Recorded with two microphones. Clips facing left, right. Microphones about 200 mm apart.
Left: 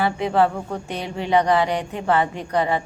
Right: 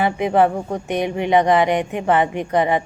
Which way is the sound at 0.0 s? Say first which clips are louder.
Right 3 dB; 20° right (ahead or behind).